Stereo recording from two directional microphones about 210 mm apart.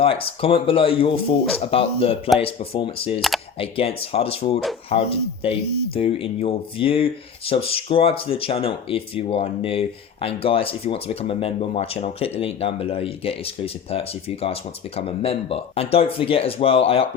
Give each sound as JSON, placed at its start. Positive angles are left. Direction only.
{"t": 0.0, "sound": "speech", "side_deg": 25}
{"t": 3.2, "sound": "speech", "side_deg": 0}
{"t": 3.6, "sound": "speech", "side_deg": 25}